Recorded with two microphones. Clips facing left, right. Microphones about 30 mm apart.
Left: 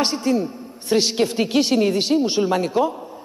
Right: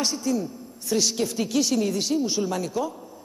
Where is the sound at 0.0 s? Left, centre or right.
Left.